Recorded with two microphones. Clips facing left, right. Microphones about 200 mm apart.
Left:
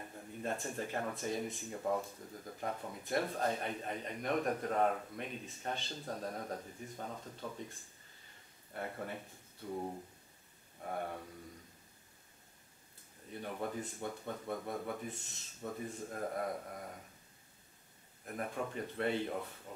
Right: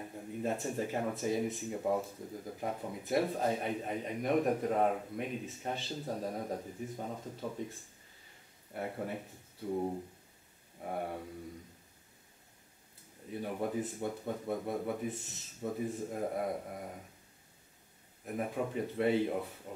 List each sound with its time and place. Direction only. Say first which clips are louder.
0.0 s speech: right 5 dB; 5° right (ahead or behind)
8.7 s speech: right 4 dB; 10° right (ahead or behind)
9.7 s speech: right 6 dB; 15° right (ahead or behind)
13.3 s speech: right 5 dB; 5° right (ahead or behind)
18.2 s speech: right 4 dB; 5° right (ahead or behind)